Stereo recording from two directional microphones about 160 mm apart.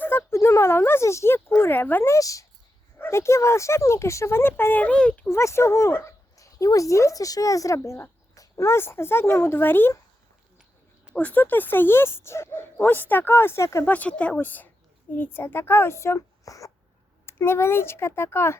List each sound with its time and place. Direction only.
0.0 s speech: 15° left (ahead or behind)
11.0 s speech: 5° left (ahead or behind)